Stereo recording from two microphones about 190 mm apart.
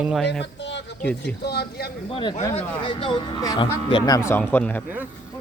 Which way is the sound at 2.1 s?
25° left (ahead or behind).